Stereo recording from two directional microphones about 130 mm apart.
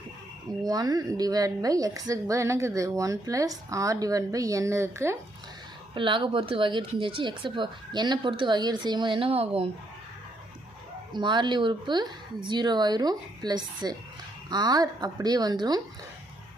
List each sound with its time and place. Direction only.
0.6 s a woman's voice: 30° right (ahead or behind)
5.9 s a woman's voice: 40° right (ahead or behind)
11.1 s a woman's voice: 35° right (ahead or behind)